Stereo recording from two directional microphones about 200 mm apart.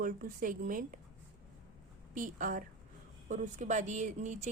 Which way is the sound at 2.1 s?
40° right (ahead or behind).